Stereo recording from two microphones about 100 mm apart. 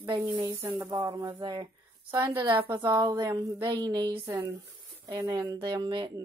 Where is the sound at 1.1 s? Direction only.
45° right (ahead or behind).